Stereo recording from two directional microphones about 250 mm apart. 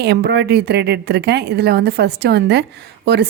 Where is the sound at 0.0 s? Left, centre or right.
Right.